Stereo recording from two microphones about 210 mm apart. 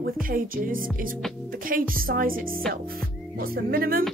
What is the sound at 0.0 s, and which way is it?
Speech, 40° right (ahead or behind).